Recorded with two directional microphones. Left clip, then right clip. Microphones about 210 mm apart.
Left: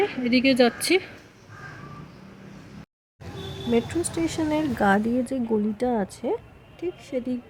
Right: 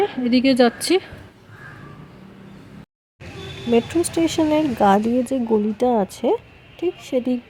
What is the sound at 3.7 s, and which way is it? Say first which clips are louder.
Speech: right 6 dB; 25° right (ahead or behind).